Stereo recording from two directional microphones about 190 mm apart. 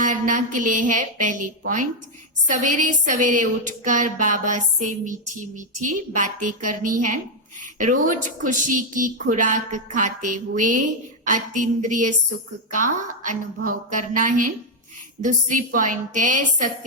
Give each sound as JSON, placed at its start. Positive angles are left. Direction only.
{"t": 0.0, "sound": "a woman's voice", "side_deg": -40}
{"t": 13.2, "sound": "a woman's voice", "side_deg": -45}